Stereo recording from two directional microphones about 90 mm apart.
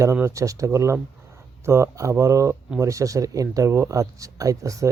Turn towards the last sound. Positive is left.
turn(degrees=-35)  # may be behind; listen again after turning